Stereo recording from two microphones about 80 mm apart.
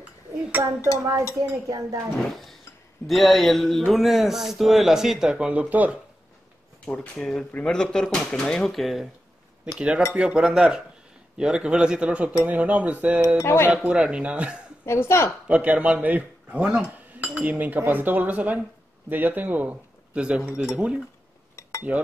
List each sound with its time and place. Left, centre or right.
0.5 s speech: right
1.5 s speech: right
2.1 s a man's voice: centre
7.2 s a man's voice: centre
9.8 s speech: centre
13.4 s a woman's voice: left
13.8 s speech: centre
14.9 s a woman's voice: left
15.4 s speech: centre